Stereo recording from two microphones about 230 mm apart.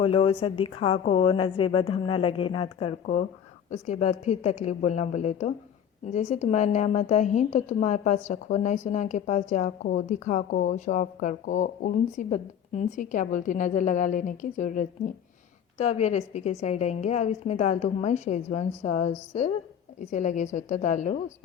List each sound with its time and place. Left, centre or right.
0.0 s a woman's voice: left